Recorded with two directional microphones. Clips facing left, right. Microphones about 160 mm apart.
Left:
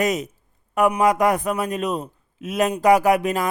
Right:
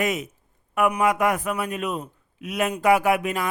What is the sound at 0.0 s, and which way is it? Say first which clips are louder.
A man's voice: left 3 dB; 40° left (ahead or behind).